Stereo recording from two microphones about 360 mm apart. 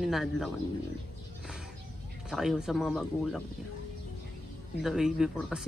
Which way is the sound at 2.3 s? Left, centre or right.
Centre.